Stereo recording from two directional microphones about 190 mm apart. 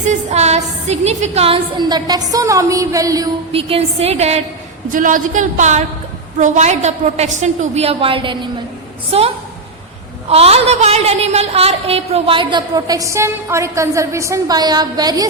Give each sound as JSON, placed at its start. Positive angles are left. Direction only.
{"t": 0.1, "sound": "a woman's voice", "side_deg": -35}
{"t": 3.5, "sound": "a woman's voice", "side_deg": -30}
{"t": 4.9, "sound": "a woman's voice", "side_deg": -45}